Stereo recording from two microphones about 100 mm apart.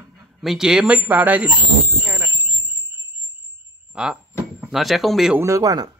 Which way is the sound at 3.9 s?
10° right (ahead or behind).